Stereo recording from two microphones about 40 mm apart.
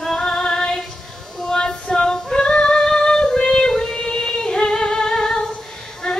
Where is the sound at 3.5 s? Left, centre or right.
Centre.